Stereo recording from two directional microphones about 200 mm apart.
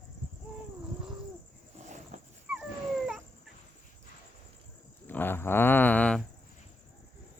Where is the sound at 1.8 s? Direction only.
35° right (ahead or behind).